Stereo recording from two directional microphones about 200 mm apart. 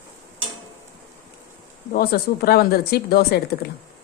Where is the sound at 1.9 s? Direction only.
50° left (ahead or behind).